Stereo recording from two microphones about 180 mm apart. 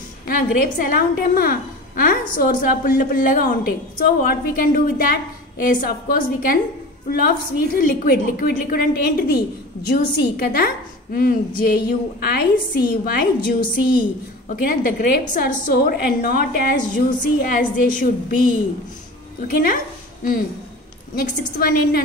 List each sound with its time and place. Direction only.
0.3 s a woman's voice: 50° left (ahead or behind)
19.5 s a woman's voice: 50° left (ahead or behind)
21.1 s a woman's voice: 55° left (ahead or behind)